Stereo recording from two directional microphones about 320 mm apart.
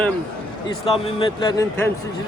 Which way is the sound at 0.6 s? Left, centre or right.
Centre.